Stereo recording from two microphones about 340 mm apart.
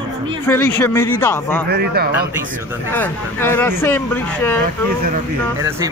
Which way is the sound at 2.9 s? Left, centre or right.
Centre.